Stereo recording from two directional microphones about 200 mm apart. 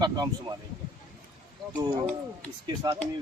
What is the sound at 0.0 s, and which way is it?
Speech, 20° right (ahead or behind).